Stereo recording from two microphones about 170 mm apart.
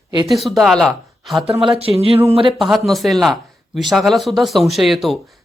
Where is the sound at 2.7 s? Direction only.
Centre (ahead or behind).